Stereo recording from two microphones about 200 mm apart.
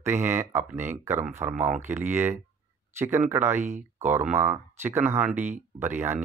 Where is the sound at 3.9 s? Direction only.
10° right (ahead or behind).